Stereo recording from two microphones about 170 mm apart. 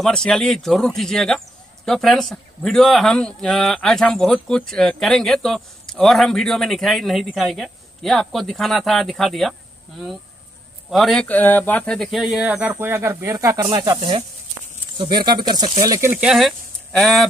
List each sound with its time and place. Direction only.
0.0 s speech: 5° left (ahead or behind)